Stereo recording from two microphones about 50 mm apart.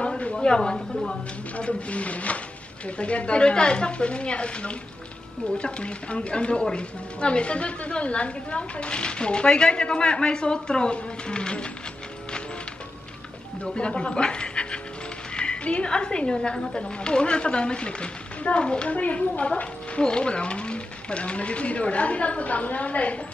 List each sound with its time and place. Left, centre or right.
0.0 s speech: centre
1.6 s a woman's voice: left
13.7 s a woman's voice: left